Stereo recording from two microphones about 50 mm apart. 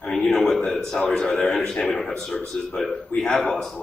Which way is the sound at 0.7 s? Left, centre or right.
Centre.